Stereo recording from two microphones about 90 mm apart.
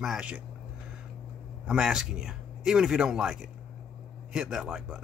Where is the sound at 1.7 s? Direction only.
5° right (ahead or behind).